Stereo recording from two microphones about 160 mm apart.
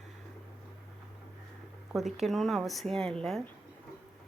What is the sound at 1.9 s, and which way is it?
Speech, centre (ahead or behind).